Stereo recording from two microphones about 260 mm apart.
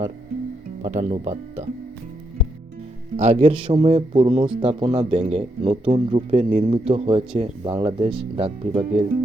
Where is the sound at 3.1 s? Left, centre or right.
Right.